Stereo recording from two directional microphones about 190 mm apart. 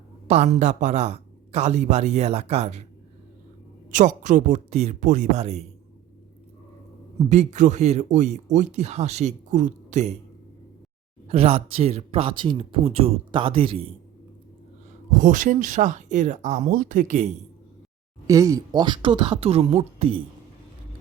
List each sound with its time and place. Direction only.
0.3 s speech: 35° right (ahead or behind)
3.9 s speech: 40° right (ahead or behind)
7.3 s speech: 40° right (ahead or behind)
11.3 s a man's voice: 30° right (ahead or behind)
15.1 s speech: 45° right (ahead or behind)
18.3 s a man's voice: 15° right (ahead or behind)